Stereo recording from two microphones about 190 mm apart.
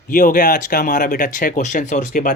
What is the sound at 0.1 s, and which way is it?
Speech, 45° left (ahead or behind).